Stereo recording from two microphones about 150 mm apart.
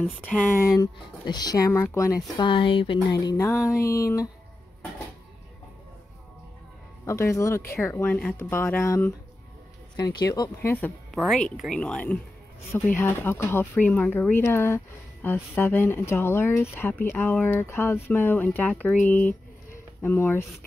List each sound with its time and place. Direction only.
0.0 s speech: 10° left (ahead or behind)
2.3 s speech: 35° left (ahead or behind)
7.1 s speech: 20° left (ahead or behind)
9.9 s speech: 25° left (ahead or behind)
11.1 s speech: 5° left (ahead or behind)